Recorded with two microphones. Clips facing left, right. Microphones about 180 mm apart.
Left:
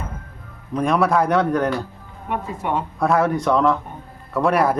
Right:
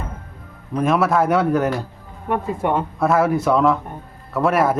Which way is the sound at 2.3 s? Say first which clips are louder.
Right 4 dB; 50° right (ahead or behind).